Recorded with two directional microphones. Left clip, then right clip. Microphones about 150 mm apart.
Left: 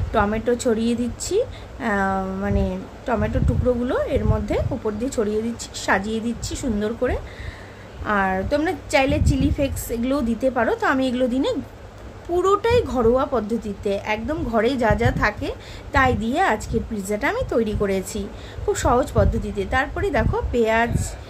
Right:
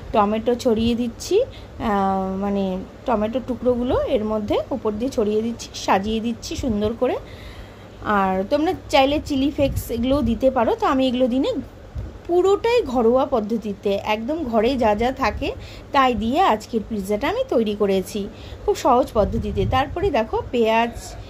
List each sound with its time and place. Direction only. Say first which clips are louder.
0.1 s a woman's voice: right 2 dB; 15° right (ahead or behind)